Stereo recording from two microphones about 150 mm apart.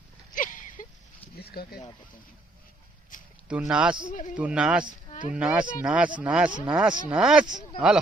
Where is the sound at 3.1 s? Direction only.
60° left (ahead or behind).